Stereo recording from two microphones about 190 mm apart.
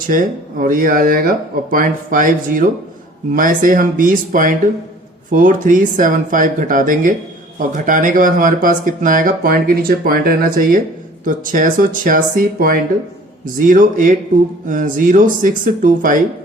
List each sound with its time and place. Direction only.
0.0 s speech: 45° right (ahead or behind)